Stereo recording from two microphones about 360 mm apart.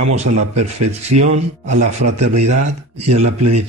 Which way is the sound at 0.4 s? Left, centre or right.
Right.